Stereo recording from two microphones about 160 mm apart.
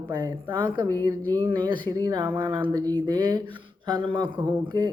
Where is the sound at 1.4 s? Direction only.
30° right (ahead or behind).